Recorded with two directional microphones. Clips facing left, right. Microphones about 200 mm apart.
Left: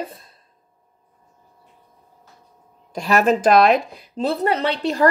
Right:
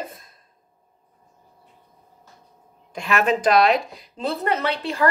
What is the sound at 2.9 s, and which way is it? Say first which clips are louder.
Speech: left 4 dB; 40° left (ahead or behind).